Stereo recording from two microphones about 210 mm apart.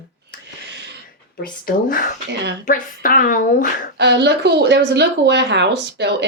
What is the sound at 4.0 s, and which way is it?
Speech, 55° right (ahead or behind).